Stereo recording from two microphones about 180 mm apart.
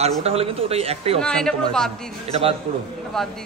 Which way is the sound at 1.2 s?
5° left (ahead or behind).